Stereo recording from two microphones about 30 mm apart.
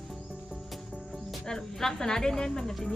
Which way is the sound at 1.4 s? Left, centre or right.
Centre.